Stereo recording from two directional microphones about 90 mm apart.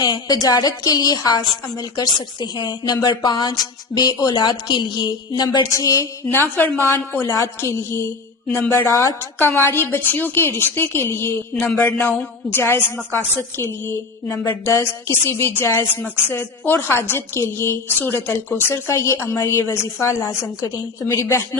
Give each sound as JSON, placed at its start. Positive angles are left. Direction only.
{"t": 0.0, "sound": "a woman's voice", "side_deg": 45}
{"t": 6.3, "sound": "a woman's voice", "side_deg": 25}